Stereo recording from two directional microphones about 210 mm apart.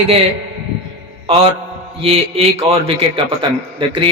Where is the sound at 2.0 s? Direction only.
30° right (ahead or behind).